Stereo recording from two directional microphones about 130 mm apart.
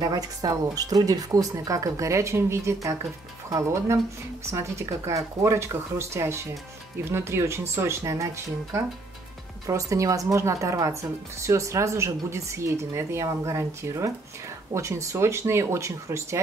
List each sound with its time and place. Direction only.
0.0 s speech: 30° right (ahead or behind)
9.7 s speech: 25° right (ahead or behind)